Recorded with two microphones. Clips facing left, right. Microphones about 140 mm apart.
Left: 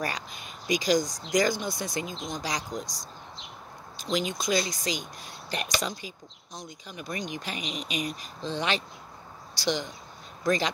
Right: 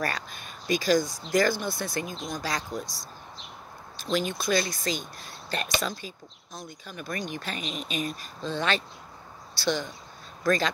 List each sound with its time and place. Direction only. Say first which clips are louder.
0.0 s speech: right 1 dB; 15° left (ahead or behind)